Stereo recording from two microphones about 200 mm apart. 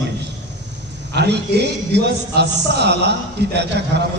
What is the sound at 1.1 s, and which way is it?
A man's voice, 55° right (ahead or behind).